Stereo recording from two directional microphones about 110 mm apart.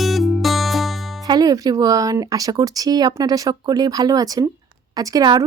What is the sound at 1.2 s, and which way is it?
Speech, 35° right (ahead or behind).